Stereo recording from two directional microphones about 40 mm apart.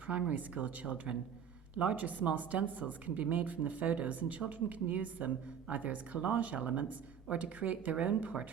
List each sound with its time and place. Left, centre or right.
0.3 s speech: right